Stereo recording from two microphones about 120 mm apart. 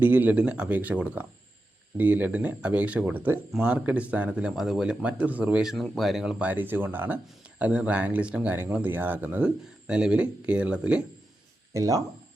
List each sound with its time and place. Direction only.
0.0 s speech: 15° right (ahead or behind)
6.5 s speech: 15° right (ahead or behind)
11.7 s speech: 25° right (ahead or behind)